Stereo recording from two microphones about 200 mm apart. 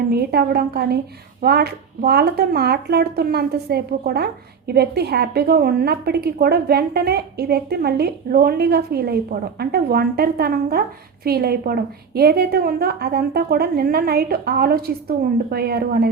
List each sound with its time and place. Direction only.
0.1 s speech: 50° right (ahead or behind)